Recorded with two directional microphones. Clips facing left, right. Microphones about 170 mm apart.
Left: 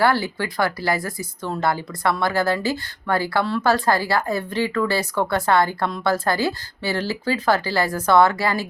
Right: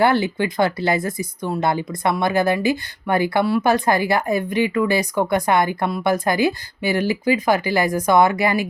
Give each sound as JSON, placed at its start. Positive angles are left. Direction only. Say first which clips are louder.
{"t": 0.0, "sound": "speech", "louder": "right 3 dB", "side_deg": -20}